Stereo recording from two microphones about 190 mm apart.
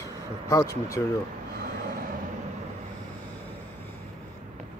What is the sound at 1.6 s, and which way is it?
Vehicle, 45° right (ahead or behind).